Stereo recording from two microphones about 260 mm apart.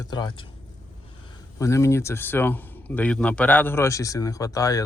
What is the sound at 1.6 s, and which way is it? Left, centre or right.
A man's voice, centre.